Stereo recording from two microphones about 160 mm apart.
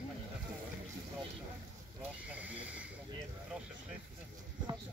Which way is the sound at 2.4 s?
10° right (ahead or behind).